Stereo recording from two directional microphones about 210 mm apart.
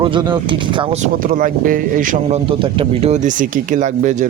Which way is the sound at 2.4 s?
25° right (ahead or behind).